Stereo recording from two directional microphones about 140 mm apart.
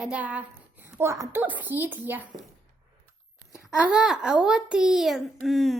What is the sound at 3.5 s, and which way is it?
A child's voice, 5° right (ahead or behind).